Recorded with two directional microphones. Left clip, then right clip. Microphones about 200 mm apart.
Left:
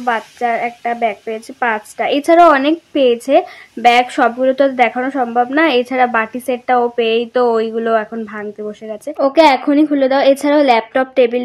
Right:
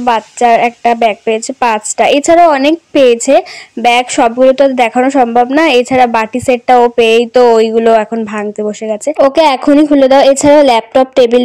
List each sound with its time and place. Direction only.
0.0 s a woman's voice: 35° right (ahead or behind)